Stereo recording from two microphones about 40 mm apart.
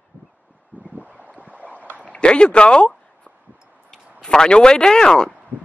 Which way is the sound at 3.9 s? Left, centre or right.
Centre.